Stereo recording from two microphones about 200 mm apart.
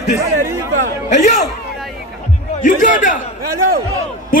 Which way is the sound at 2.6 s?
40° left (ahead or behind).